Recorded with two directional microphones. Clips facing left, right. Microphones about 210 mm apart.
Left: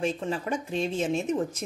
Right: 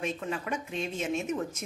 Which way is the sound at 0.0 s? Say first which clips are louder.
Left 4 dB; 30° left (ahead or behind).